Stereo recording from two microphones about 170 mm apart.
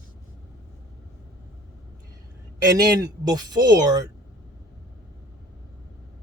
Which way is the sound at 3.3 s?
20° right (ahead or behind).